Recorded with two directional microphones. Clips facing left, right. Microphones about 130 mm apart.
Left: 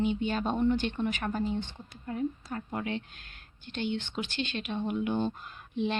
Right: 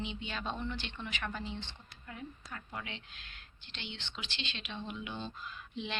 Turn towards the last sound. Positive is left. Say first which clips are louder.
# left 9 dB
turn(degrees=50)  # may be behind; listen again after turning